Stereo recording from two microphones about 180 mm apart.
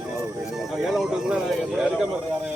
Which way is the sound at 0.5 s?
Centre (ahead or behind).